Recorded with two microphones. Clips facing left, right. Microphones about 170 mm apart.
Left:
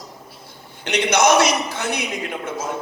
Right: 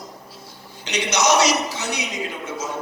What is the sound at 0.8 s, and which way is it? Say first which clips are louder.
A man's voice: left 4 dB; 55° left (ahead or behind).